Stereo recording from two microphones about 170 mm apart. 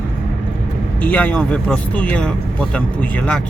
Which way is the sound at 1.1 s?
5° left (ahead or behind).